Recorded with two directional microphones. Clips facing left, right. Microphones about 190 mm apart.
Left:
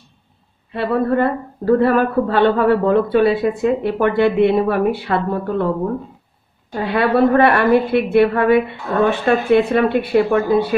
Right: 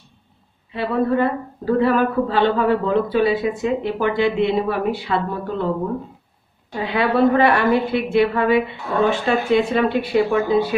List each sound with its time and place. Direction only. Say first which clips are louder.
0.7 s a woman's voice: left 2 dB; 55° left (ahead or behind)
6.7 s a woman's voice: left 3 dB; 50° left (ahead or behind)